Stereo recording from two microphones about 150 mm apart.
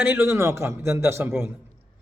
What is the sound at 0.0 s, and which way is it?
Speech, 15° right (ahead or behind).